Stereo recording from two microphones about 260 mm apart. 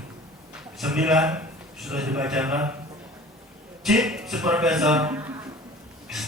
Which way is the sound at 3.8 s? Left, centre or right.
Centre.